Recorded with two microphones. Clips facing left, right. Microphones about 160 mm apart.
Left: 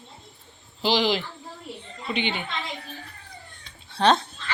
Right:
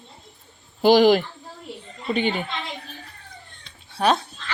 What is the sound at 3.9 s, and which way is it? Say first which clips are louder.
Speech: even; 10° right (ahead or behind).